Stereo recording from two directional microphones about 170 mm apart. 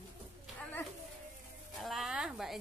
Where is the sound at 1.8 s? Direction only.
Centre (ahead or behind).